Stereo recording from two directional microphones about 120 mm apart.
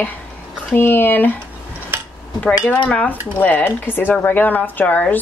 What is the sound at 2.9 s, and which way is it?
Speech, 15° left (ahead or behind).